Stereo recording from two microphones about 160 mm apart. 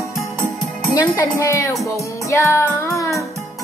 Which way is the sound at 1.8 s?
15° left (ahead or behind).